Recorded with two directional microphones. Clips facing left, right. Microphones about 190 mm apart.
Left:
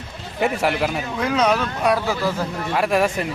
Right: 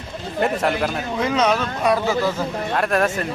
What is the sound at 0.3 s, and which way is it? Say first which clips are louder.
Speech: even; 5° left (ahead or behind).